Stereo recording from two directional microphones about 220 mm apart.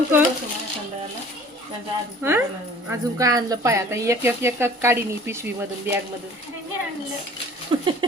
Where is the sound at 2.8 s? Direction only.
15° right (ahead or behind).